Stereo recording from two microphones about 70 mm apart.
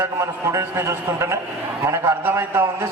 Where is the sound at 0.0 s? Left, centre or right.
Right.